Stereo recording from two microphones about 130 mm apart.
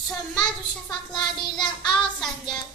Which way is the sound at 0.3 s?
5° left (ahead or behind).